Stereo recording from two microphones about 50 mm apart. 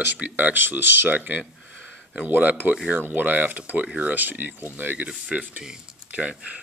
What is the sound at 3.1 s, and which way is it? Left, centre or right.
Speech, right.